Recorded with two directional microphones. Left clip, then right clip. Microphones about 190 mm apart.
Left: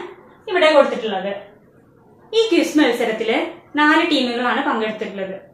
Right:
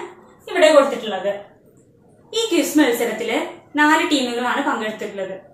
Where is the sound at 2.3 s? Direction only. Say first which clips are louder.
Left 3 dB; 20° left (ahead or behind).